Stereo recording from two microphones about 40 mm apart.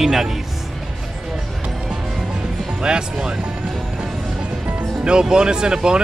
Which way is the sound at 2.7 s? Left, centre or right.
Right.